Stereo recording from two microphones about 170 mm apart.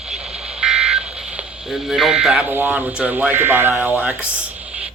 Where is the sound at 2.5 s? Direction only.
10° right (ahead or behind).